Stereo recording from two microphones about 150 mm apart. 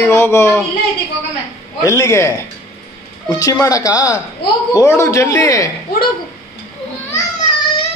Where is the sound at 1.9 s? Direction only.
20° left (ahead or behind).